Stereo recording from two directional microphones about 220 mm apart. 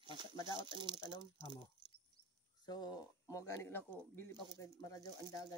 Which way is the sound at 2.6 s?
20° left (ahead or behind).